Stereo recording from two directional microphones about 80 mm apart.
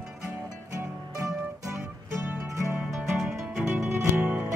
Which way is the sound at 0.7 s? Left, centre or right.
Right.